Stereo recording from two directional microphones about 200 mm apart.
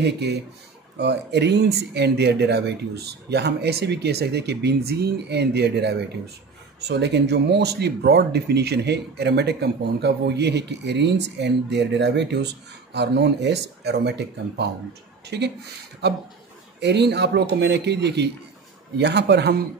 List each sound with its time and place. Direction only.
0.0 s speech: 55° right (ahead or behind)